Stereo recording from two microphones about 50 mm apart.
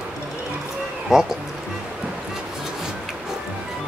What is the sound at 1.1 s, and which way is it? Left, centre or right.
Speech, centre.